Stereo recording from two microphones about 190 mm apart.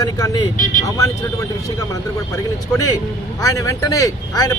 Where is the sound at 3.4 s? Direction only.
15° left (ahead or behind).